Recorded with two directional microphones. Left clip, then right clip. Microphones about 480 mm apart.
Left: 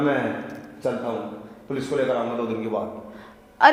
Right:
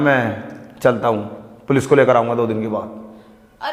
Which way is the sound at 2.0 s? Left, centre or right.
Right.